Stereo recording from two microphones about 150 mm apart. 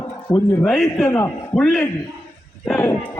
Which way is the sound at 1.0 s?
20° left (ahead or behind).